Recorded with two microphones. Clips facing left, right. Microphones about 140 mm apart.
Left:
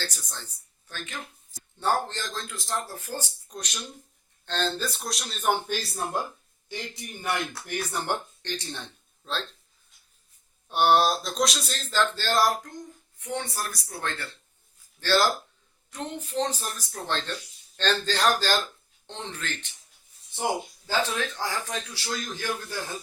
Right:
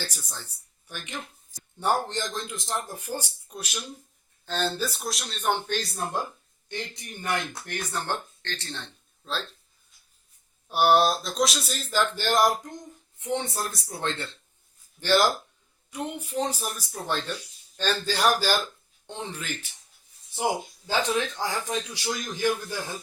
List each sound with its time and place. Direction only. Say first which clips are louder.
0.0 s speech: even; 10° right (ahead or behind); by 8.9 s 15° left (ahead or behind)
9.2 s speech: even; centre (ahead or behind)
10.7 s a woman's voice: right 1 dB; centre (ahead or behind)